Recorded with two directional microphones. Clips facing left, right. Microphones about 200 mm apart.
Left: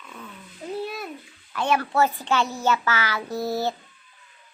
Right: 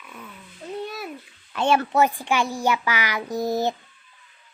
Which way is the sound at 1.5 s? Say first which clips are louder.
Right 3 dB; 25° right (ahead or behind).